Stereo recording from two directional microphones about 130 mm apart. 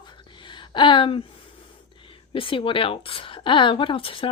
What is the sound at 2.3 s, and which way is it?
A woman's voice, 40° left (ahead or behind).